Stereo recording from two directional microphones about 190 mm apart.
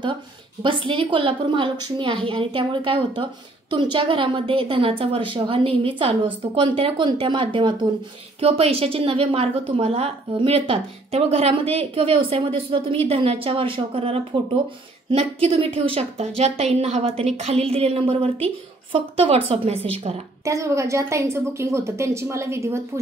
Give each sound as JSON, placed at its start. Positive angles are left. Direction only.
{"t": 0.6, "sound": "a woman's voice", "side_deg": -25}
{"t": 20.4, "sound": "a woman's voice", "side_deg": -15}